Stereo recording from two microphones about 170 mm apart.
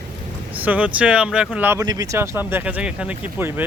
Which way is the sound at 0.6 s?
10° right (ahead or behind).